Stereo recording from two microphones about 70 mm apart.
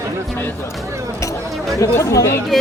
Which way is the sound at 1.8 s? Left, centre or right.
Left.